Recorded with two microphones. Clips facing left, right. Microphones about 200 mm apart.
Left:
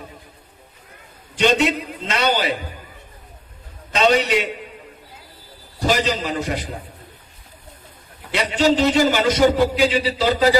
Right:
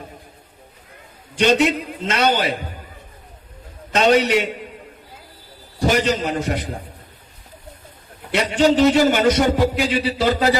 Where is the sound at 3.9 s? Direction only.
55° right (ahead or behind).